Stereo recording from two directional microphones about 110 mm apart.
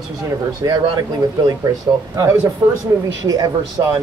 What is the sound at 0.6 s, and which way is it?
Speech, 40° right (ahead or behind).